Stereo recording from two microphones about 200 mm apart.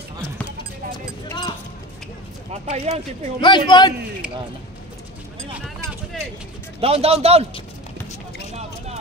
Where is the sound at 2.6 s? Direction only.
35° right (ahead or behind).